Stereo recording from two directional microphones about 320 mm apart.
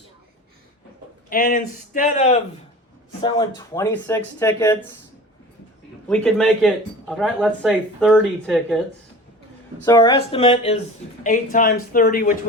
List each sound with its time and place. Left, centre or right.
1.3 s speech: left; by 4.8 s centre
6.1 s speech: centre
9.8 s speech: centre